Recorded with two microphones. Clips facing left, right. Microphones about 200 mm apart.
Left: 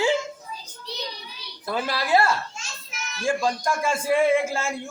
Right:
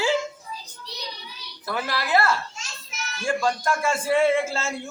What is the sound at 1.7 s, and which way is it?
Speech, 25° left (ahead or behind).